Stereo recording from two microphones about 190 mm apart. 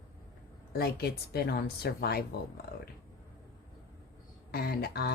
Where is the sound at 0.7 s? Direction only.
55° left (ahead or behind).